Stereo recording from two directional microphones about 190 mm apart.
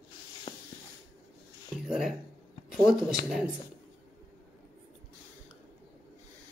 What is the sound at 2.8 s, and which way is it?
Speech, 5° right (ahead or behind).